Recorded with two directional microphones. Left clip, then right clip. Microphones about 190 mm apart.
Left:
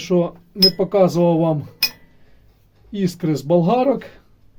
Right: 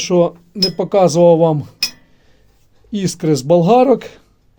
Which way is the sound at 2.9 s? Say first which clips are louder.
Right 5 dB; 45° right (ahead or behind).